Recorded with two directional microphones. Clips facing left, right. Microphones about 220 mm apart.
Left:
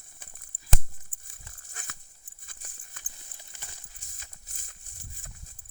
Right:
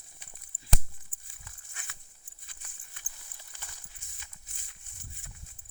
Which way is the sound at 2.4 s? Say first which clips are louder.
Left 4 dB; 45° left (ahead or behind).